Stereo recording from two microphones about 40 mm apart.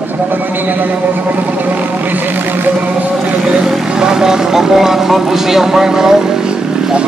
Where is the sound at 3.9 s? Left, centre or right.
Centre.